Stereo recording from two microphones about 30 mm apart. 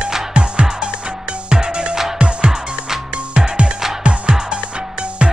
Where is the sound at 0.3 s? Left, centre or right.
Right.